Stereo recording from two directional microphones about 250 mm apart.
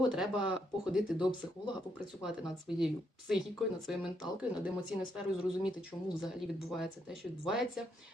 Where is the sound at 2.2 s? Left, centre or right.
Centre.